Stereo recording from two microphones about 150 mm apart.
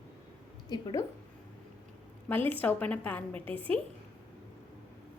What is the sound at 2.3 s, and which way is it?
A woman's voice, 10° left (ahead or behind).